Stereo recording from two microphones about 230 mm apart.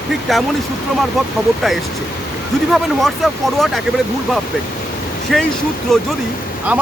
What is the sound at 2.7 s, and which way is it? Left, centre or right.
Speech, centre.